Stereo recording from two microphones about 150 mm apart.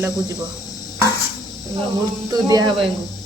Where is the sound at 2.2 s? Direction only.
25° right (ahead or behind).